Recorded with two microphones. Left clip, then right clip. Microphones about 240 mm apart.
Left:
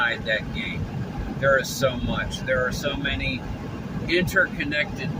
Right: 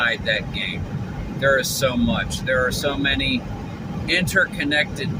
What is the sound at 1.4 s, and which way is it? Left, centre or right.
Speech, centre.